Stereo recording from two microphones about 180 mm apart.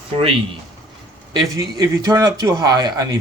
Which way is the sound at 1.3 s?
25° right (ahead or behind).